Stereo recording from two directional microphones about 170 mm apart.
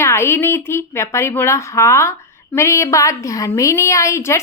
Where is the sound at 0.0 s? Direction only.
15° left (ahead or behind).